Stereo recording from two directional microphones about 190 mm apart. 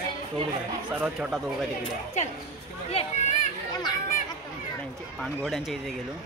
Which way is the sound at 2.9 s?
40° left (ahead or behind).